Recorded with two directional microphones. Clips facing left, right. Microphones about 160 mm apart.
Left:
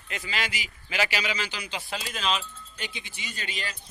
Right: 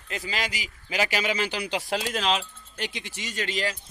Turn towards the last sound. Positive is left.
turn(degrees=-85)